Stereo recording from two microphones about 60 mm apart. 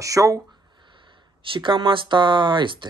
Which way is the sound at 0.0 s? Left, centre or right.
Right.